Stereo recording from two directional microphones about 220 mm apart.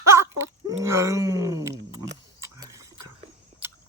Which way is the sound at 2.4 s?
15° right (ahead or behind).